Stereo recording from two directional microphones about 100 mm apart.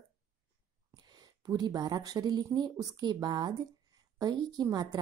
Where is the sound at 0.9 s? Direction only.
40° right (ahead or behind).